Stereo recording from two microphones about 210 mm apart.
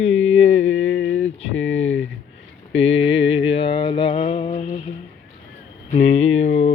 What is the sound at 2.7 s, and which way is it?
Mantra, 30° left (ahead or behind).